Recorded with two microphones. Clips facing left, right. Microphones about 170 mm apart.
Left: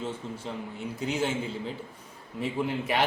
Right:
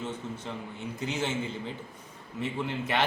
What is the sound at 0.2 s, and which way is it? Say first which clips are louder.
Speech: even; 30° left (ahead or behind).